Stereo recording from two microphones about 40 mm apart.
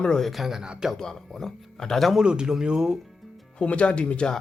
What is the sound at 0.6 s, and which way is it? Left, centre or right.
Speech, centre.